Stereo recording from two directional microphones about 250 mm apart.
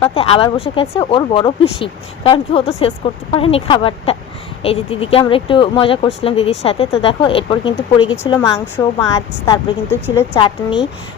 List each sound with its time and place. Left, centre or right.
0.0 s speech: left
8.2 s speech: centre
10.3 s speech: centre